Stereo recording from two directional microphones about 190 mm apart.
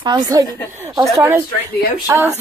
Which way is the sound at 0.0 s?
20° right (ahead or behind).